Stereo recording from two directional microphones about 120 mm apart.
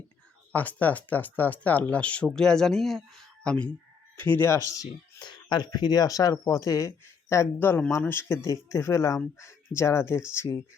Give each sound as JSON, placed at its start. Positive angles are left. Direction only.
{"t": 0.5, "sound": "speech", "side_deg": 15}
{"t": 4.3, "sound": "speech", "side_deg": 20}